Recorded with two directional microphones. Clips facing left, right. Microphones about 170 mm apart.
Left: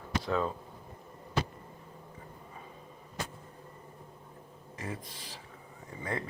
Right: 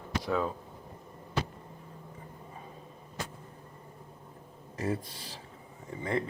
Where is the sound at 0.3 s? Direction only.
5° right (ahead or behind).